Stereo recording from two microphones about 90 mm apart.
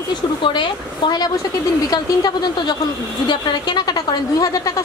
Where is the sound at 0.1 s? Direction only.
60° left (ahead or behind).